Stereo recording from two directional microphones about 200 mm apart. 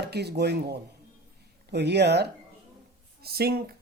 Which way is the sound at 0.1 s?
55° right (ahead or behind).